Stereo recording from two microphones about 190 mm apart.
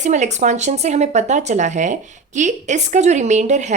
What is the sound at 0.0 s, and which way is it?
A woman's voice, 40° right (ahead or behind).